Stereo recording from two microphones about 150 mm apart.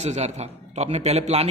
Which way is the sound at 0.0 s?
50° right (ahead or behind).